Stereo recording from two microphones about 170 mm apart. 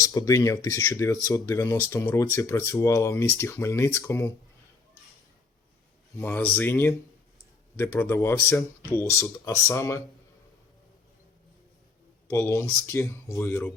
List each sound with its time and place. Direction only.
0.0 s speech: 20° left (ahead or behind)
6.1 s speech: 15° left (ahead or behind)
12.3 s speech: 15° left (ahead or behind)